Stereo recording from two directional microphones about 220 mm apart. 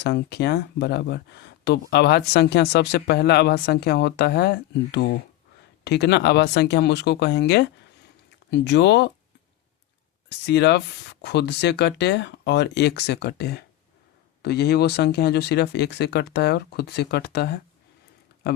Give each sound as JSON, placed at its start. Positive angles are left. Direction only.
{"t": 0.0, "sound": "speech", "side_deg": 50}
{"t": 10.2, "sound": "speech", "side_deg": 50}